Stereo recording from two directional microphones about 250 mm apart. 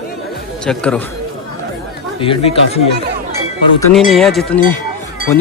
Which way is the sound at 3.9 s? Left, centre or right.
Centre.